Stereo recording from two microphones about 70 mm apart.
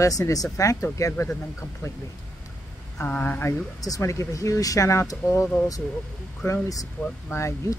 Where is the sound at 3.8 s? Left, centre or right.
Left.